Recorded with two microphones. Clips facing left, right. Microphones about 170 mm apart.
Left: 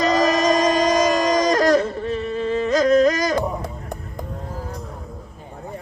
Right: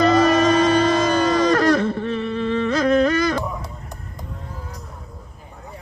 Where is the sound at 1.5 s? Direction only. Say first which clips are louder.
Even; 40° left (ahead or behind).